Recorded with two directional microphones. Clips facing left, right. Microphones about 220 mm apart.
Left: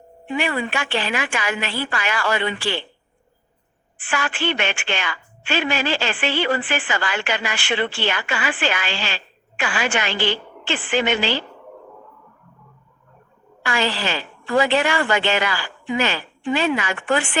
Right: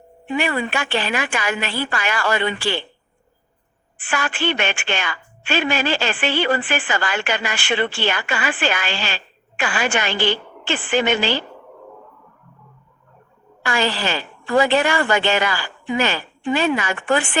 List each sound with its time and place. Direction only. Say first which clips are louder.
0.3 s a woman's voice: right 1 dB; 45° right (ahead or behind)
4.1 s a woman's voice: right 1 dB; 45° right (ahead or behind)
13.7 s a woman's voice: right 1 dB; 45° right (ahead or behind)